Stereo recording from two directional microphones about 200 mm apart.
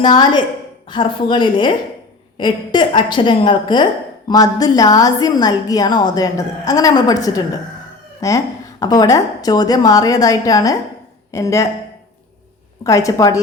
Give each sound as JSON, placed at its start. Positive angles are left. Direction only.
{"t": 0.0, "sound": "a woman's voice", "side_deg": 20}
{"t": 12.8, "sound": "a woman's voice", "side_deg": 15}